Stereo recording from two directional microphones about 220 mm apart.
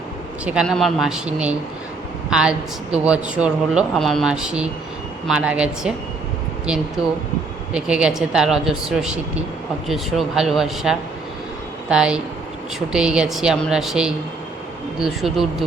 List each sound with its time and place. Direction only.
0.4 s speech: 5° right (ahead or behind)
7.7 s speech: 5° right (ahead or behind)